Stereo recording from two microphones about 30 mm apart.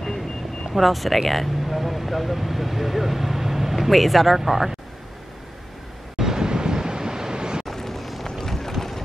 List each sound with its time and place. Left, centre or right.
0.7 s speech: centre
4.4 s speech: centre
6.1 s vehicle: centre
7.6 s vehicle: centre
8.4 s run: centre